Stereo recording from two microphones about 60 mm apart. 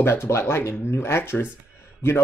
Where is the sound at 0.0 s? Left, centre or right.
Left.